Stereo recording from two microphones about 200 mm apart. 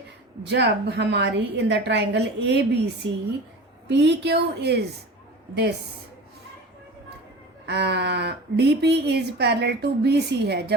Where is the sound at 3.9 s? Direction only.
60° right (ahead or behind).